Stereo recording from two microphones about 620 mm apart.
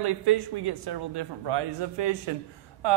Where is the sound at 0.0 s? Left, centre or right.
Right.